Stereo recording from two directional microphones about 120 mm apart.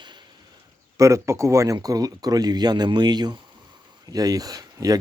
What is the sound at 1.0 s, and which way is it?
Speech, 25° right (ahead or behind).